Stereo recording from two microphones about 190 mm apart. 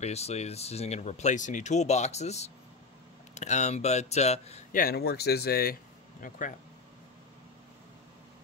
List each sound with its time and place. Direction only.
0.0 s speech: 35° left (ahead or behind)
4.7 s speech: 55° left (ahead or behind)